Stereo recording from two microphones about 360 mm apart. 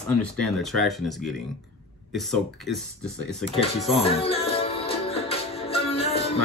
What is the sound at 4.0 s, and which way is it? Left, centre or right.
Music, centre.